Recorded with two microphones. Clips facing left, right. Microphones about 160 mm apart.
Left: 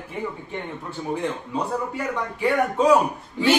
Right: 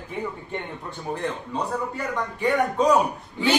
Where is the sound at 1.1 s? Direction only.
10° left (ahead or behind).